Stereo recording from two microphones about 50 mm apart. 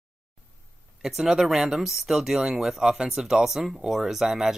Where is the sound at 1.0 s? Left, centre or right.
Centre.